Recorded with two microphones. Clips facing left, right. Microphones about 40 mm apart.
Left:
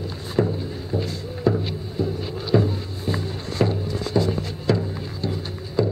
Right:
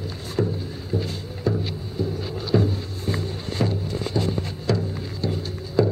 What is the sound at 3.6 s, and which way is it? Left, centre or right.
Music, centre.